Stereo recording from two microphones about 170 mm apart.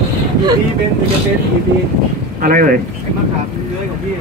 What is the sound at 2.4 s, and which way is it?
Speech, 55° right (ahead or behind).